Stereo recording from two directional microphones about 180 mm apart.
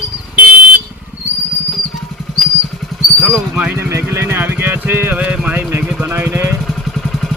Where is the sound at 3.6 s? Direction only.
10° right (ahead or behind).